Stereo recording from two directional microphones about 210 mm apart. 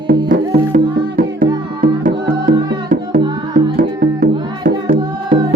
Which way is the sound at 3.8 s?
40° right (ahead or behind).